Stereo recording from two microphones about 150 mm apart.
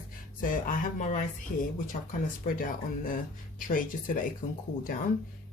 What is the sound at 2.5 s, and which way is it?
Speech, 70° left (ahead or behind).